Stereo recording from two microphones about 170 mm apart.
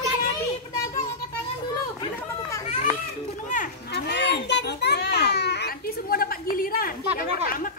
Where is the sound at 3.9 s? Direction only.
85° left; by 6.9 s 60° left (ahead or behind).